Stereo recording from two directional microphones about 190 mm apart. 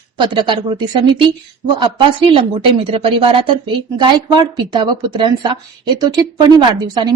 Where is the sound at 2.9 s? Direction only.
30° right (ahead or behind).